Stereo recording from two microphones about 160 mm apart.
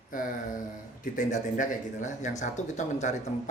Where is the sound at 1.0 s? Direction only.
50° left (ahead or behind).